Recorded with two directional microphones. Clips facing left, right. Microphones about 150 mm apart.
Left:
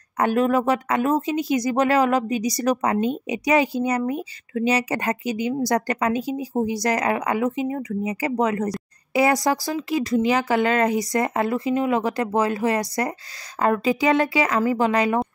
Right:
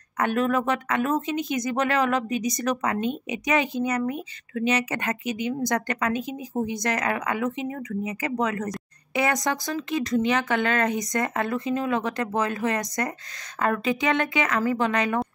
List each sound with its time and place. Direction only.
0.2 s speech: 30° left (ahead or behind)